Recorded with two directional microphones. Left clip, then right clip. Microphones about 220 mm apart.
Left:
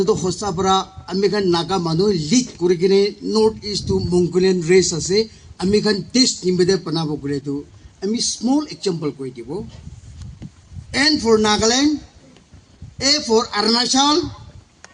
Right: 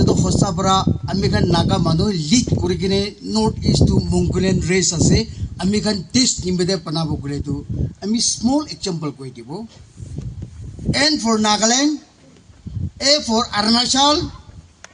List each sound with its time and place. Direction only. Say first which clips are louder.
0.0 s speech: even; 40° right (ahead or behind)
10.9 s speech: left 2 dB; 40° right (ahead or behind)
13.0 s speech: even; 40° right (ahead or behind)